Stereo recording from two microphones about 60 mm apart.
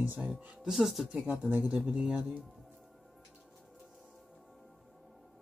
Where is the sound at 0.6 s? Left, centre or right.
Centre.